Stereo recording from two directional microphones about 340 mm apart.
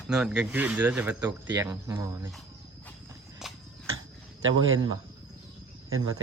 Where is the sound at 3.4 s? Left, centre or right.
Centre.